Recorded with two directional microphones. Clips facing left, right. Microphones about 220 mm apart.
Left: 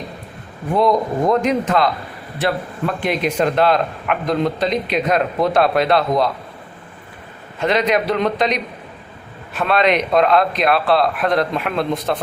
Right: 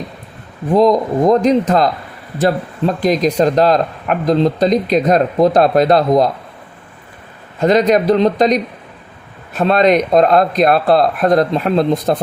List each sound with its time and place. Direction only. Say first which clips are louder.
0.7 s speech: right 5 dB; 35° right (ahead or behind)
3.0 s speech: right 5 dB; 40° right (ahead or behind)
7.6 s speech: right 6 dB; 40° right (ahead or behind)